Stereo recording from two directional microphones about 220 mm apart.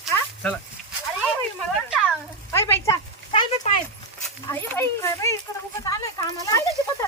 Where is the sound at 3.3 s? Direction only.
25° left (ahead or behind).